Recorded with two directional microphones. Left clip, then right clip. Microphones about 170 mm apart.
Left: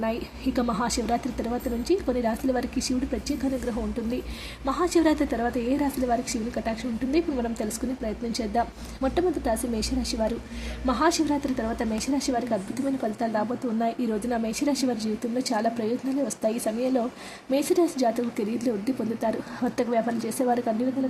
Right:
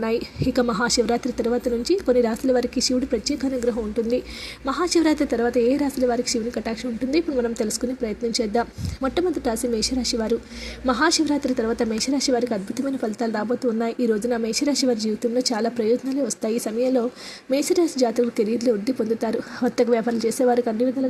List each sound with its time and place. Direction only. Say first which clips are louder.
0.0 s a woman's voice: right 5 dB; 20° right (ahead or behind)
4.6 s a woman's voice: right 2 dB; 20° right (ahead or behind)